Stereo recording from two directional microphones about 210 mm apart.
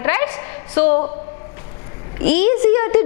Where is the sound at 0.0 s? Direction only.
10° left (ahead or behind).